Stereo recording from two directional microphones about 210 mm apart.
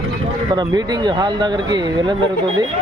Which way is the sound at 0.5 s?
20° right (ahead or behind).